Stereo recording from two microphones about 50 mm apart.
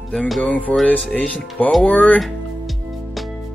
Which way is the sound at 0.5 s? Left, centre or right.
Left.